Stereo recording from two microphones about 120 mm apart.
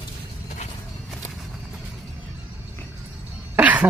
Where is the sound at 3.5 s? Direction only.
10° right (ahead or behind).